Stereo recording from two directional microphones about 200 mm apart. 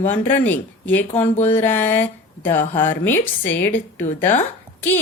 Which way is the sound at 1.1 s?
35° left (ahead or behind).